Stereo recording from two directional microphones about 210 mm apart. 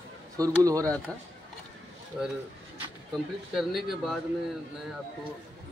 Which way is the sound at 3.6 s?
Centre (ahead or behind).